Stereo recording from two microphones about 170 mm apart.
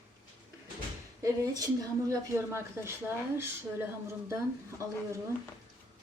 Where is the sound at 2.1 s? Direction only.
15° right (ahead or behind).